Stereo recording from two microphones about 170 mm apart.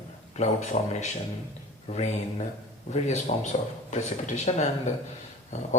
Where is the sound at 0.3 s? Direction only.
45° left (ahead or behind).